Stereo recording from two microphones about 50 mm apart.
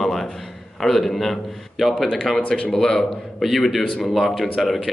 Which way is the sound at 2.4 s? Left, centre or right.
Left.